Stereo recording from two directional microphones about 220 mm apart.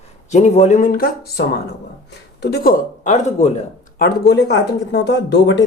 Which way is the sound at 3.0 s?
30° left (ahead or behind).